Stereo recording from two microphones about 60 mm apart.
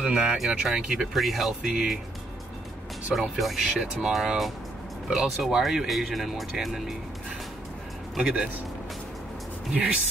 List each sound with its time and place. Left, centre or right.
0.0 s speech: centre
3.2 s speech: centre
8.2 s speech: centre
9.7 s speech: centre